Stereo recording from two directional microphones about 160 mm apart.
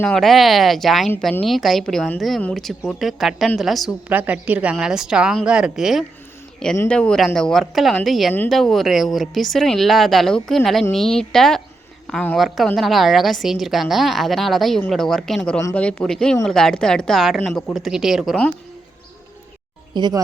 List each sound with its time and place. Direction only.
0.0 s speech: 5° left (ahead or behind)
19.9 s speech: 25° right (ahead or behind)